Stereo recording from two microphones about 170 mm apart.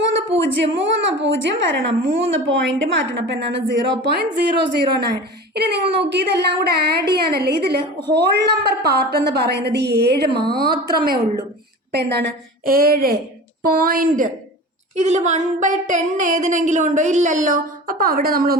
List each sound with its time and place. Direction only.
0.1 s a woman's voice: 90° right; by 11.2 s 60° right (ahead or behind)
11.9 s a woman's voice: 75° right (ahead or behind); by 14.3 s 55° right (ahead or behind)
14.9 s a sound: 45° right (ahead or behind); by 18.5 s 60° right (ahead or behind)